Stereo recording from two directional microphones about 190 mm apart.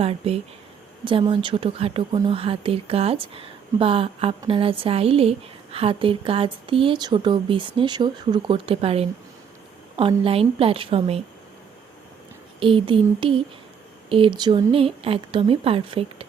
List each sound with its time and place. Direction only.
0.0 s speech: 30° right (ahead or behind)
12.5 s speech: 25° right (ahead or behind)